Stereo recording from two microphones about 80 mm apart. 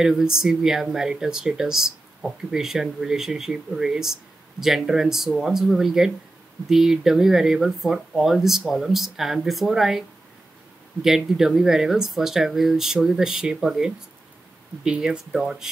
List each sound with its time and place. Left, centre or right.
0.0 s speech: centre